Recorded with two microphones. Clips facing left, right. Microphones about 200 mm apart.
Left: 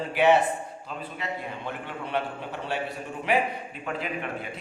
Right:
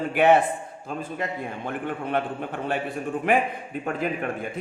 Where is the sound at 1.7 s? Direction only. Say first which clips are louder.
Right 8 dB; 50° right (ahead or behind).